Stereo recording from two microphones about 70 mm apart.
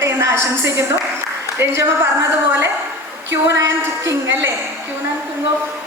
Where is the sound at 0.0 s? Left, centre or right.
Right.